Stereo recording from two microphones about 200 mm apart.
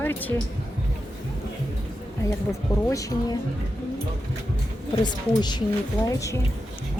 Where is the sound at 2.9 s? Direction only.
15° left (ahead or behind).